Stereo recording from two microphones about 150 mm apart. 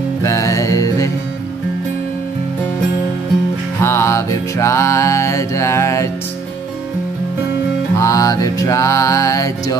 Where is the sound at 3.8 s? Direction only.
20° left (ahead or behind).